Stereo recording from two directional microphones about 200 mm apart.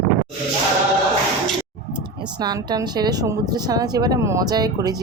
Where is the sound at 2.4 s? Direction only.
20° right (ahead or behind).